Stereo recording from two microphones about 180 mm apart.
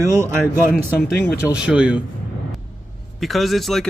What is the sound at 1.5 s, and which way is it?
Speech, 5° right (ahead or behind).